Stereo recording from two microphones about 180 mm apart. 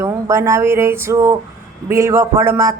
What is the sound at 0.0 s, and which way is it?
Mantra, 15° right (ahead or behind).